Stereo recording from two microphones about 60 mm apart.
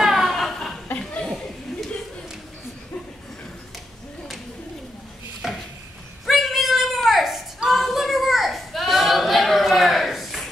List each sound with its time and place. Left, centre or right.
0.0 s chuckle: centre
0.8 s chuckle: left
5.4 s a sound: centre